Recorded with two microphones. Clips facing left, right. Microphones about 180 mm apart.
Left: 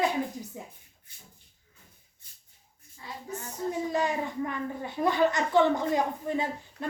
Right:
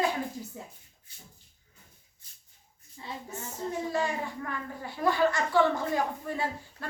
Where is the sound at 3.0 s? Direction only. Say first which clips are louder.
Right 2 dB; 25° right (ahead or behind).